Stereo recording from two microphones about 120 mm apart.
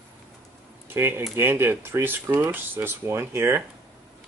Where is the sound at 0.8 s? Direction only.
20° right (ahead or behind).